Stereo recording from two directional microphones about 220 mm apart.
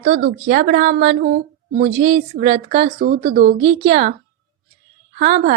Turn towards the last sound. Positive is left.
turn(degrees=-30)  # may be behind; listen again after turning